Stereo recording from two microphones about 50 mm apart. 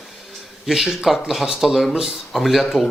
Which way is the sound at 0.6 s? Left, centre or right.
Centre.